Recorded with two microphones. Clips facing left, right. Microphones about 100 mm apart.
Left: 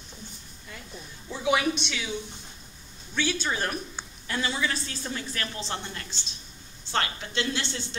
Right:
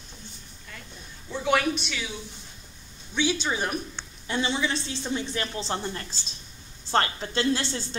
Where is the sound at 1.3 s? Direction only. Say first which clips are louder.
Right 1 dB; 5° left (ahead or behind).